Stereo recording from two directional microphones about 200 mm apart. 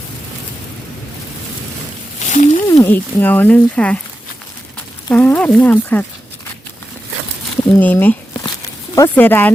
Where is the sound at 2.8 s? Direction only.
10° left (ahead or behind).